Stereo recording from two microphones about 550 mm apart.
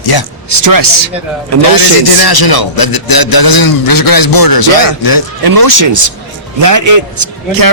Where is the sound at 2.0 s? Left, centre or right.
Left.